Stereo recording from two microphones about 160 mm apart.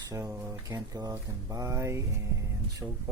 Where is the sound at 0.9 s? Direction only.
20° right (ahead or behind).